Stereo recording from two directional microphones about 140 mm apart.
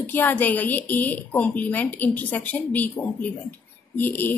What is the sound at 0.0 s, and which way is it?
Speech, 15° left (ahead or behind).